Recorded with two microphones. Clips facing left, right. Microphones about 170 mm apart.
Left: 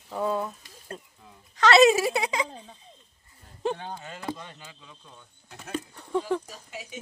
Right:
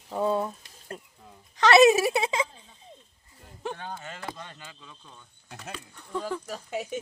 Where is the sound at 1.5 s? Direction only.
20° right (ahead or behind).